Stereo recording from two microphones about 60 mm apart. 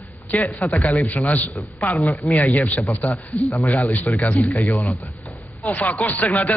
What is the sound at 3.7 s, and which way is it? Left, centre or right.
Speech, left.